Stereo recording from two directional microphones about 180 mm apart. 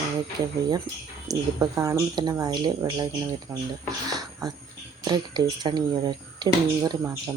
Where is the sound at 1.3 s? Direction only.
20° right (ahead or behind).